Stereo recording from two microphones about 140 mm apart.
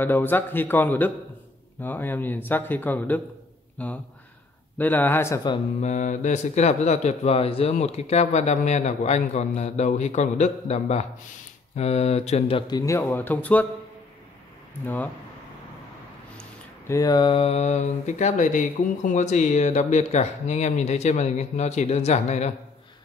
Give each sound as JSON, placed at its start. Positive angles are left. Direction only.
{"t": 0.0, "sound": "speech", "side_deg": 15}
{"t": 5.8, "sound": "a man's voice", "side_deg": 60}
{"t": 16.3, "sound": "a sound", "side_deg": 20}